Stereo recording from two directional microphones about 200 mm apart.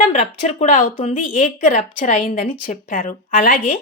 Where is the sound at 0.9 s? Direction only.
30° left (ahead or behind).